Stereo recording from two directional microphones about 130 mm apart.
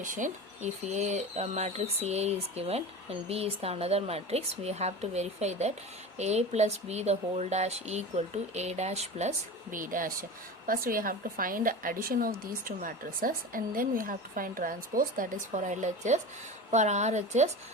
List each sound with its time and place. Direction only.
0.0 s speech: 80° right; by 9.3 s 55° right (ahead or behind)
9.7 s a woman's voice: 90° right; by 17.5 s 60° right (ahead or behind)